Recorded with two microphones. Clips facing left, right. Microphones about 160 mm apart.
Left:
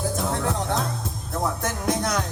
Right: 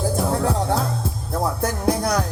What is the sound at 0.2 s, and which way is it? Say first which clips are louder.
Music: right 4 dB; 30° right (ahead or behind).